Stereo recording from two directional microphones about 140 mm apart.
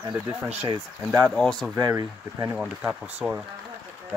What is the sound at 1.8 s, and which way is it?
Speech, 25° right (ahead or behind).